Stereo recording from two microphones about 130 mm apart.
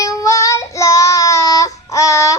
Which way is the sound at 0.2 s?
25° left (ahead or behind).